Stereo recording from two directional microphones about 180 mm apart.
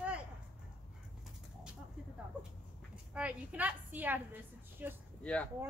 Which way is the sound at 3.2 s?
10° right (ahead or behind).